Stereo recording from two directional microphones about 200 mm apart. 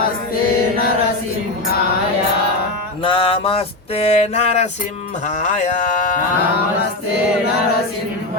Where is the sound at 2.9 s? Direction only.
25° left (ahead or behind).